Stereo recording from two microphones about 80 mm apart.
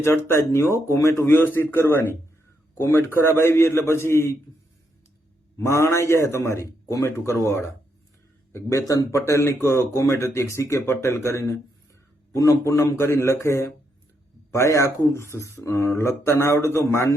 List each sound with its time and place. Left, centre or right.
0.0 s speech: left
5.5 s speech: left
8.5 s speech: left